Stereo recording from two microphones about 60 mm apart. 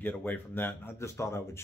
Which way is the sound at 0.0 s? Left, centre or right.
Left.